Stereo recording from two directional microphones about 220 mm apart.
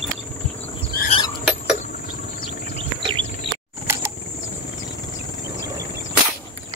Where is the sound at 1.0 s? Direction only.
45° left (ahead or behind).